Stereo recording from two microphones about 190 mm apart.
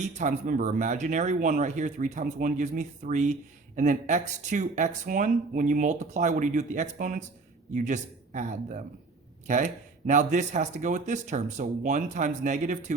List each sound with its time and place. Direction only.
0.2 s speech: 40° right (ahead or behind)